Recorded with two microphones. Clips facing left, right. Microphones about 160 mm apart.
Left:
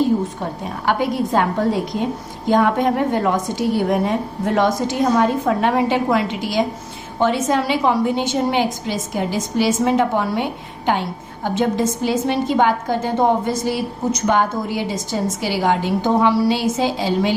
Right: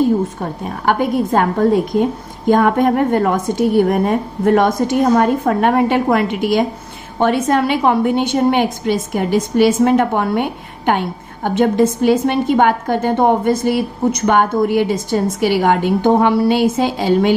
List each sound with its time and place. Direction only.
0.7 s a woman's voice: 50° right (ahead or behind)